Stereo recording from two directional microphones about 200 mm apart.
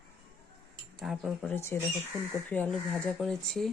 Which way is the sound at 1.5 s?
10° left (ahead or behind).